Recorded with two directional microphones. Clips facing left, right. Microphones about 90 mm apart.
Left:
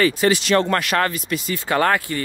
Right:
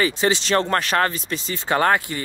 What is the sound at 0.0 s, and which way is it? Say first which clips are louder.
Speech: left 3 dB; 25° right (ahead or behind).